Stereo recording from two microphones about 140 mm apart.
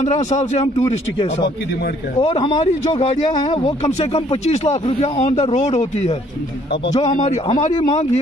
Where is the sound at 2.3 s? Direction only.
40° left (ahead or behind).